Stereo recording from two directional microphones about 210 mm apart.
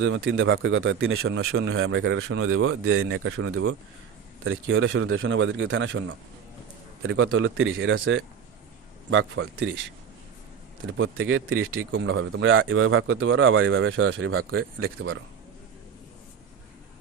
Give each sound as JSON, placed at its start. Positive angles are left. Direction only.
{"t": 0.3, "sound": "speech", "side_deg": -65}
{"t": 11.0, "sound": "speech", "side_deg": -65}
{"t": 14.6, "sound": "speech", "side_deg": -45}